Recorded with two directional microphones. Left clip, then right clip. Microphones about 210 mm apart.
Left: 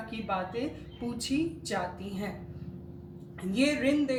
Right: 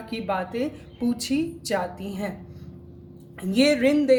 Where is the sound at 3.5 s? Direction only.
50° right (ahead or behind).